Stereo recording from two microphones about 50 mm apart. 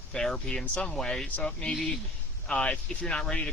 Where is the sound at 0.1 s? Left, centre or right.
Centre.